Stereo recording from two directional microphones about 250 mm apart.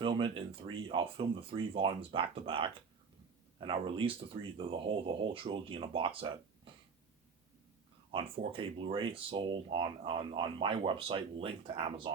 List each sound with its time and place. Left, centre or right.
0.0 s speech: right
8.1 s speech: right